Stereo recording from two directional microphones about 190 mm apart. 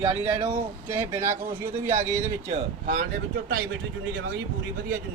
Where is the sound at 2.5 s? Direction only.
40° right (ahead or behind).